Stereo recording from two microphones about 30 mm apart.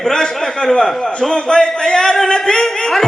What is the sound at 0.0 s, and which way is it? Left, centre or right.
A man's voice, left.